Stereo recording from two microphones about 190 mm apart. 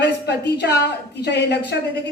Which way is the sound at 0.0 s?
60° left (ahead or behind).